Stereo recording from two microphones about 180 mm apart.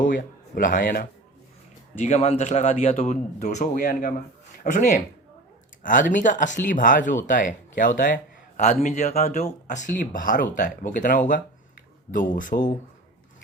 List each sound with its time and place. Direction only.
0.0 s speech: 50° left (ahead or behind)
2.0 s a man's voice: 40° left (ahead or behind)